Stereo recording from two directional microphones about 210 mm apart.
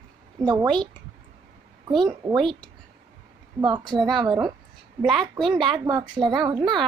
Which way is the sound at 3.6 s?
20° right (ahead or behind).